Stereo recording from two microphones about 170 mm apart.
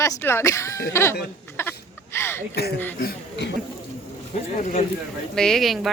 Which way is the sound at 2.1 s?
15° left (ahead or behind).